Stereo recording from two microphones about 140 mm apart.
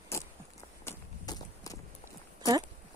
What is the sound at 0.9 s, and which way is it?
Walk, 20° left (ahead or behind).